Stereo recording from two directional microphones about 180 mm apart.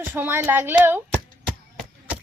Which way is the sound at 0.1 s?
10° right (ahead or behind).